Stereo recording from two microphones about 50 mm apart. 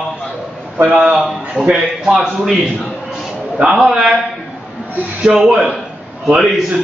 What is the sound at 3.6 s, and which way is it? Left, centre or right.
Speech, centre.